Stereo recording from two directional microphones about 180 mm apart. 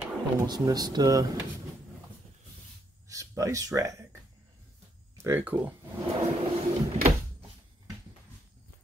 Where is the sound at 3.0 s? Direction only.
20° right (ahead or behind).